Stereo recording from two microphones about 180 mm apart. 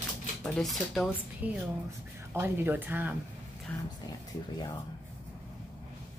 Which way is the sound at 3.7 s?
10° left (ahead or behind).